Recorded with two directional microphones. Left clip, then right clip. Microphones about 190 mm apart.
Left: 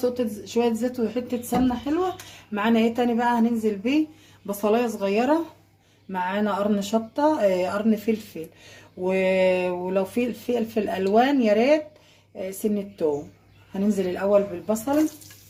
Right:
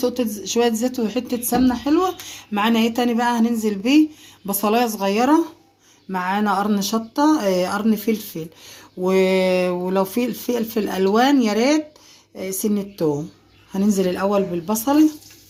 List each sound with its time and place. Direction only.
0.0 s speech: 45° right (ahead or behind)